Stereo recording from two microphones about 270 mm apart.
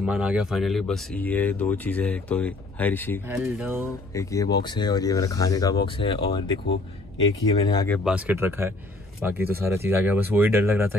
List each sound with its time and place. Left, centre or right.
0.0 s speech: centre
3.3 s speech: centre
3.8 s speech: centre
7.9 s speech: centre